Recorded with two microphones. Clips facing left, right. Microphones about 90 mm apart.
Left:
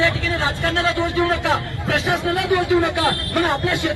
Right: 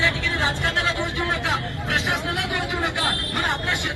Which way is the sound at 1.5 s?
20° left (ahead or behind).